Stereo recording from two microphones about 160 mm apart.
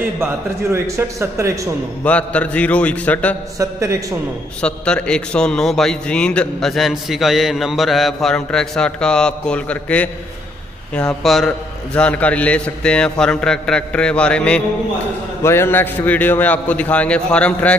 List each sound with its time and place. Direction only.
0.2 s a man's voice: 15° right (ahead or behind)
2.0 s a man's voice: 10° left (ahead or behind)
3.5 s a man's voice: 20° right (ahead or behind)
4.6 s a man's voice: 5° left (ahead or behind)